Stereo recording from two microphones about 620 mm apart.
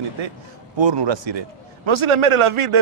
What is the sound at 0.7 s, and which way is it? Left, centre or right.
A man's voice, right.